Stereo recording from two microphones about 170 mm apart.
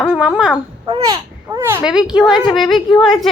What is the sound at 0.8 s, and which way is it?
A child's voice, 25° right (ahead or behind).